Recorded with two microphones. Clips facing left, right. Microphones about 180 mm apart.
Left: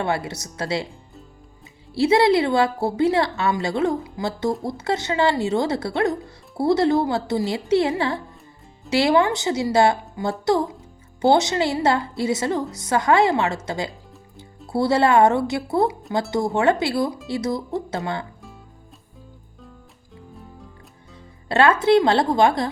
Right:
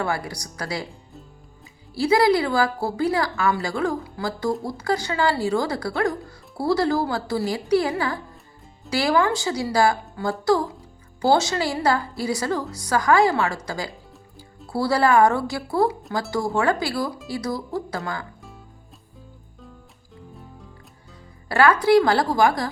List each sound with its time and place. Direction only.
0.0 s a woman's voice: 25° left (ahead or behind)
2.0 s a woman's voice: 25° left (ahead or behind)
21.5 s a woman's voice: 25° left (ahead or behind)